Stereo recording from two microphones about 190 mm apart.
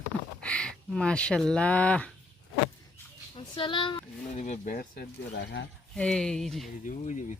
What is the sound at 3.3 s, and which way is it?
Speech, 25° left (ahead or behind).